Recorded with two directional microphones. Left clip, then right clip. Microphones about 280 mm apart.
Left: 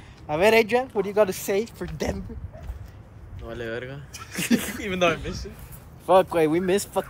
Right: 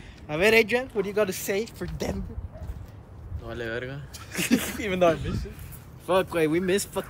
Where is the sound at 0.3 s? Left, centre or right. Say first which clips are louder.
Left 2 dB; centre; by 2.2 s left.